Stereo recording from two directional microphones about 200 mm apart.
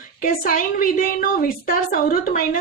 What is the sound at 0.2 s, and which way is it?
A woman's voice, 45° left (ahead or behind).